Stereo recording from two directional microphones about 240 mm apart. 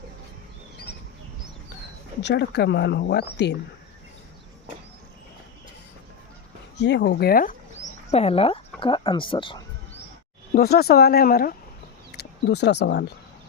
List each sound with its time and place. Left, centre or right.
2.2 s speech: left
6.7 s speech: left
8.1 s speech: left
10.5 s speech: left